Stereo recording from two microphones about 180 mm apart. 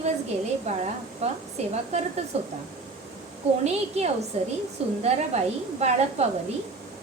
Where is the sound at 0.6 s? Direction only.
35° right (ahead or behind).